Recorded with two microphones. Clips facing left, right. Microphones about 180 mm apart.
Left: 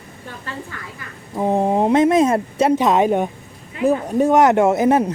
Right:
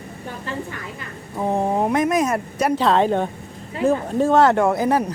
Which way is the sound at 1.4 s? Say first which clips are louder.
Left 3 dB; 15° left (ahead or behind).